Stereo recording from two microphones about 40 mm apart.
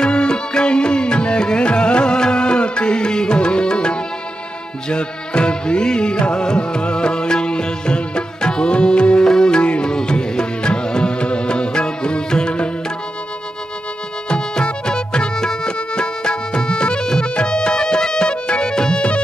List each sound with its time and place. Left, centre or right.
0.0 s music: left
14.3 s music: left